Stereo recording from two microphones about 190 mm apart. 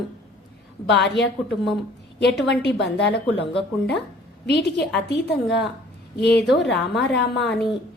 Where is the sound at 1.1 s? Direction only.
65° left (ahead or behind).